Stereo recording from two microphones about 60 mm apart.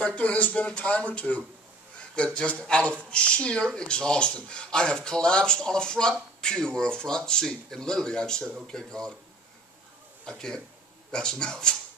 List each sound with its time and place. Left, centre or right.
0.0 s a man's voice: left
10.2 s a man's voice: centre